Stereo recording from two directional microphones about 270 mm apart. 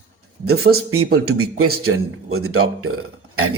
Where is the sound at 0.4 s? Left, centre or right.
Right.